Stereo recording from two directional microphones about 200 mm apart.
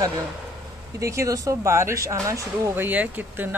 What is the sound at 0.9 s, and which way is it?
Speech, 15° right (ahead or behind).